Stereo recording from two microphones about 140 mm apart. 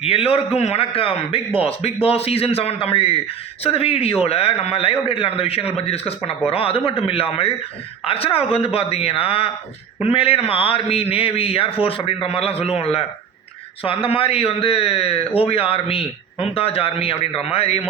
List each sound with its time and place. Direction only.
0.0 s a man's voice: 45° left (ahead or behind)